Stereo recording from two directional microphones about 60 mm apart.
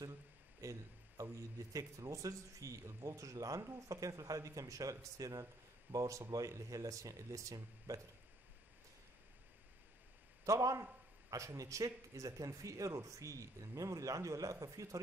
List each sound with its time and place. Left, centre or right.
0.6 s a man's voice: right
10.4 s a man's voice: right